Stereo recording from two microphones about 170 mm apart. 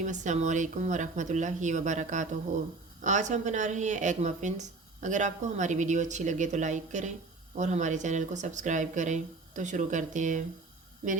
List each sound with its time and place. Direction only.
0.0 s speech: 45° right (ahead or behind)